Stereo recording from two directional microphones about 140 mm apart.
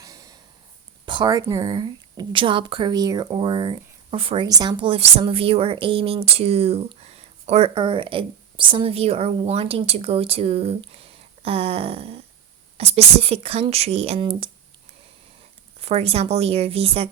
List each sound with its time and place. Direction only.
0.0 s snort: 25° right (ahead or behind)
1.0 s speech: 35° right (ahead or behind)
4.4 s speech: 25° right (ahead or behind)
15.8 s speech: 45° right (ahead or behind)